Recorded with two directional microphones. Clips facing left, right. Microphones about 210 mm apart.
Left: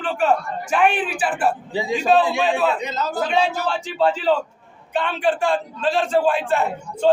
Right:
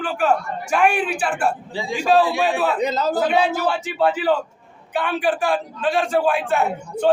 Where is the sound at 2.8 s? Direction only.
35° right (ahead or behind).